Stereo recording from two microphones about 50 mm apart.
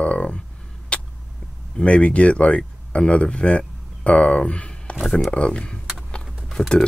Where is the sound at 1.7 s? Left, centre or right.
Left.